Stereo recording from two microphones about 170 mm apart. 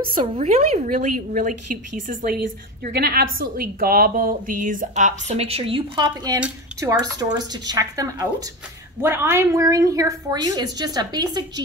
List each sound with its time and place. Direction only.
0.0 s a woman's voice: 30° right (ahead or behind)
0.8 s a woman's voice: 45° right (ahead or behind)
2.3 s a woman's voice: 65° right (ahead or behind); by 11.6 s 25° right (ahead or behind)